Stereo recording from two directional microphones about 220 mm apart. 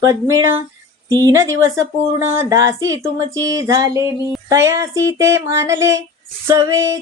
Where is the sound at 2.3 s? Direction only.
15° right (ahead or behind).